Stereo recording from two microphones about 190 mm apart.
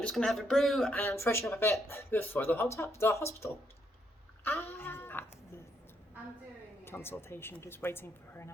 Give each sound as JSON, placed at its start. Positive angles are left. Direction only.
{"t": 0.0, "sound": "a woman's voice", "side_deg": 5}
{"t": 6.8, "sound": "a woman's voice", "side_deg": 10}